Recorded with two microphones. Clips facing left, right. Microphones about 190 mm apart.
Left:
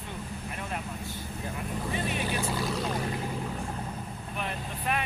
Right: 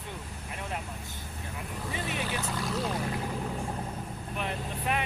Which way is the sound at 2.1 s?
15° left (ahead or behind).